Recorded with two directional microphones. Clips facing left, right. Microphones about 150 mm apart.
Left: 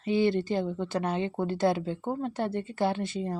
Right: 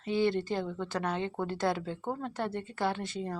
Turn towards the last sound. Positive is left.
turn(degrees=25)  # may be behind; listen again after turning